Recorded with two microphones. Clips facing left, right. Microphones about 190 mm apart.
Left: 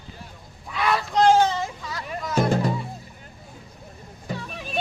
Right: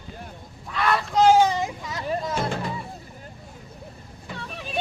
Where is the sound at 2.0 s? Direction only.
30° right (ahead or behind).